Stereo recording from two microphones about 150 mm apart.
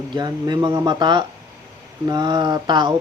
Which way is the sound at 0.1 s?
25° right (ahead or behind).